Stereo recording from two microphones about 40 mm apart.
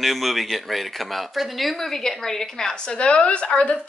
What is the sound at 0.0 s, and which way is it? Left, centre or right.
A woman's voice, centre.